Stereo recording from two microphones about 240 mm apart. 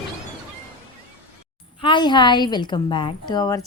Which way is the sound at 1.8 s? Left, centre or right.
Centre.